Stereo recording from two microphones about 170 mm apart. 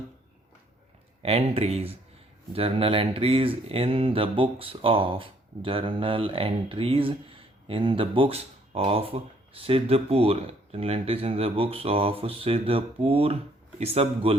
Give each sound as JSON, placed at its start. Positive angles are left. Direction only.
{"t": 1.2, "sound": "speech", "side_deg": -35}